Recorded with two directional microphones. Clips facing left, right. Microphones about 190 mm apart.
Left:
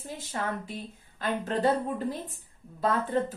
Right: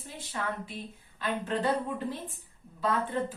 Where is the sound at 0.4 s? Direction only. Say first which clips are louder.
Left 2 dB; 45° left (ahead or behind).